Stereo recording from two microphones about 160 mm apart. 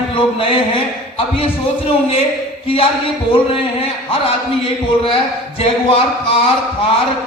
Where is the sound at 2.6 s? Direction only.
35° left (ahead or behind).